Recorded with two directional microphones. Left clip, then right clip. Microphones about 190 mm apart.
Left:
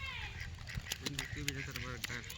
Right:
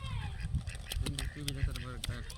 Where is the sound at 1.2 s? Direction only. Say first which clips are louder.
Left 1 dB; 55° right (ahead or behind).